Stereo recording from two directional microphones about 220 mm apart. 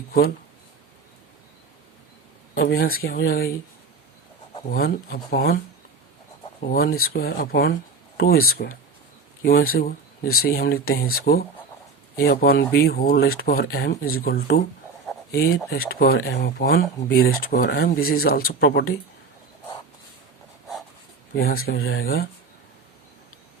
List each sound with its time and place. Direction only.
2.6 s speech: 40° left (ahead or behind)
4.7 s speech: 40° left (ahead or behind)
6.6 s speech: 40° left (ahead or behind)
21.3 s speech: 45° left (ahead or behind)